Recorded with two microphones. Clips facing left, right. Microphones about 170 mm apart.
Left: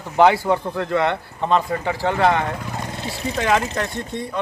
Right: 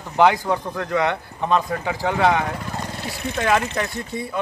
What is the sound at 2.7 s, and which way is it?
Vehicle, 20° left (ahead or behind).